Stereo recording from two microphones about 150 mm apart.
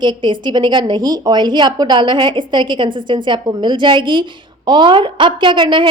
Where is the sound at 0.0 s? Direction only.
30° right (ahead or behind).